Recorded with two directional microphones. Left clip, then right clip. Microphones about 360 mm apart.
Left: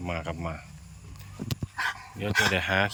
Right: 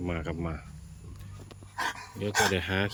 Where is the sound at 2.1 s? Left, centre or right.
Centre.